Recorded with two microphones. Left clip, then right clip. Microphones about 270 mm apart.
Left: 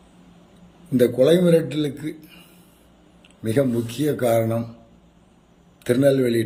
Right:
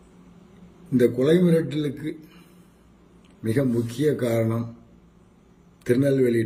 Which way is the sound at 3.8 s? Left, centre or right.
Centre.